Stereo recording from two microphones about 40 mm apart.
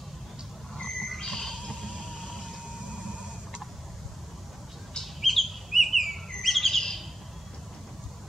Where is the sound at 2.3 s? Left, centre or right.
Centre.